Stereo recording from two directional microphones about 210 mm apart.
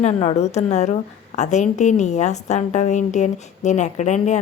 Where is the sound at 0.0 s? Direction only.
30° left (ahead or behind).